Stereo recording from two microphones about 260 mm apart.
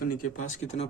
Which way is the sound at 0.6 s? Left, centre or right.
Left.